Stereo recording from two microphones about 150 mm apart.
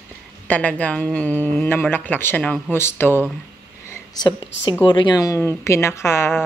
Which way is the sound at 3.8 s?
25° left (ahead or behind).